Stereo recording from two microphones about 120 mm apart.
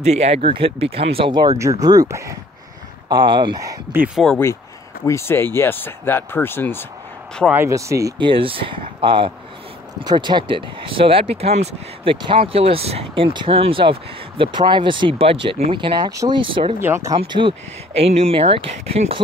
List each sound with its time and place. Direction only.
0.0 s speech: 65° right (ahead or behind); by 1.5 s 40° right (ahead or behind)
1.6 s speech: 30° right (ahead or behind)
3.1 s speech: 40° right (ahead or behind)
3.9 s speech: 15° right (ahead or behind)
5.0 s speech: 20° left (ahead or behind)
7.5 s speech: 25° right (ahead or behind)
8.2 s speech: 45° right (ahead or behind)
16.1 s speech: 25° right (ahead or behind)
16.3 s speech: 45° right (ahead or behind)
16.8 s speech: 20° right (ahead or behind)
17.3 s speech: 45° right (ahead or behind)